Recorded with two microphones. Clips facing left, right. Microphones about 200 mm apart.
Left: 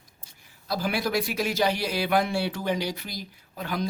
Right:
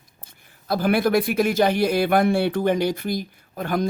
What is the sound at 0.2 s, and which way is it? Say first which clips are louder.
Speech: right 6 dB; 55° right (ahead or behind).